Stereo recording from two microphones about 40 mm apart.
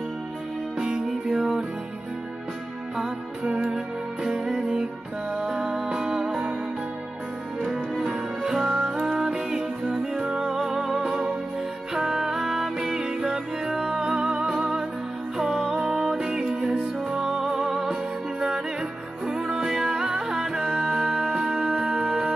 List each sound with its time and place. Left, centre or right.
1.2 s music: centre
3.4 s music: right
3.7 s music: centre
8.0 s music: right
8.6 s music: right
9.0 s music: centre
17.1 s music: centre